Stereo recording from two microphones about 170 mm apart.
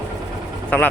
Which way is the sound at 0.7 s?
10° left (ahead or behind).